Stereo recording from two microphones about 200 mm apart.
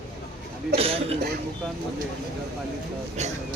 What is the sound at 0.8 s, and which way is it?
Speech, 30° right (ahead or behind).